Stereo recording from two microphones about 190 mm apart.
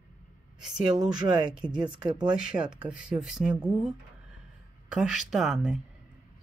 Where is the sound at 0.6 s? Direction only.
5° right (ahead or behind).